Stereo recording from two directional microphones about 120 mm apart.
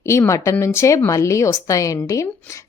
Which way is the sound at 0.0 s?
25° left (ahead or behind).